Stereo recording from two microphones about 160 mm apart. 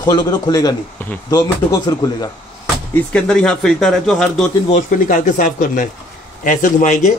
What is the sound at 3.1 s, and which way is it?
Speech, 5° left (ahead or behind).